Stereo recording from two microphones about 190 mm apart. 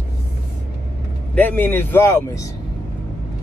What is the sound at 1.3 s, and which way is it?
Speech, 10° left (ahead or behind).